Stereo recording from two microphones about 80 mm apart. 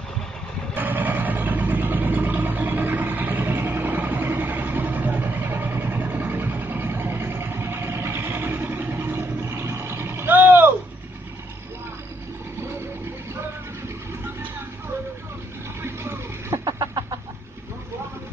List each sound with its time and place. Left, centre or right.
0.7 s vehicle: right
15.8 s vehicle: right
16.6 s chicken: right